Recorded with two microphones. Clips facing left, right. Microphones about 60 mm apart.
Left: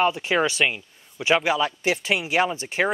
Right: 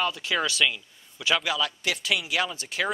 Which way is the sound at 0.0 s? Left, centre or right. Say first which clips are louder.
Left 6 dB; left.